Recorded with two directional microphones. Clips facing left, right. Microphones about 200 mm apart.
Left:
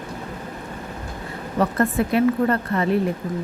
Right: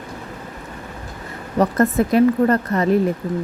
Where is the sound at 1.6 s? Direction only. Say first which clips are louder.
Right 4 dB; 40° right (ahead or behind).